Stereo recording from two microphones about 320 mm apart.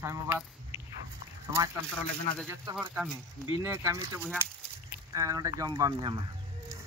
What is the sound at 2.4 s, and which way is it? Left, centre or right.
Speech, centre.